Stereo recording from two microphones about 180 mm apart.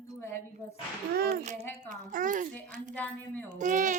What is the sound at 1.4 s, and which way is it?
A woman's voice, 40° right (ahead or behind).